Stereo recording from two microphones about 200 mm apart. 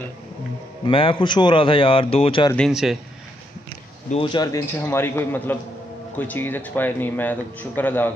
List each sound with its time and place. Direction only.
0.8 s speech: 25° left (ahead or behind)
2.5 s speech: centre (ahead or behind)
4.1 s speech: 25° left (ahead or behind); by 8.1 s 10° left (ahead or behind)